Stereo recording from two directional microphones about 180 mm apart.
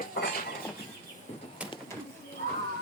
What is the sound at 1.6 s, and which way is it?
Bird, 5° right (ahead or behind).